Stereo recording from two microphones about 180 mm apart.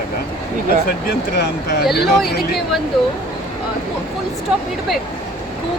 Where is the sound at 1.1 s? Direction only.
65° left (ahead or behind).